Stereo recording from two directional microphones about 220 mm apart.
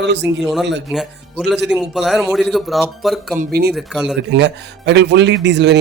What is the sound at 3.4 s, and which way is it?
Speech, 45° right (ahead or behind).